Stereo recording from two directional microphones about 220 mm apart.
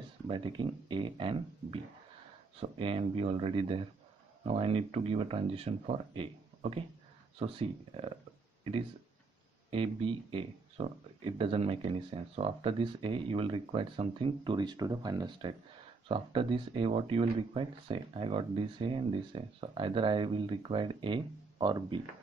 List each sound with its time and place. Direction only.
0.3 s speech: 20° right (ahead or behind)
9.7 s speech: 25° right (ahead or behind)